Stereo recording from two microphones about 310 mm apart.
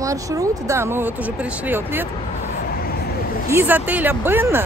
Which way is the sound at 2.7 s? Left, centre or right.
Left.